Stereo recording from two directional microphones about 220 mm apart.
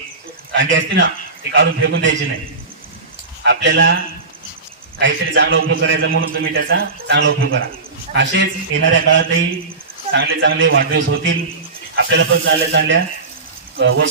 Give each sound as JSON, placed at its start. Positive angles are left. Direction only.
{"t": 0.5, "sound": "a man's voice", "side_deg": -55}
{"t": 3.4, "sound": "a man's voice", "side_deg": -55}
{"t": 4.9, "sound": "a man's voice", "side_deg": -55}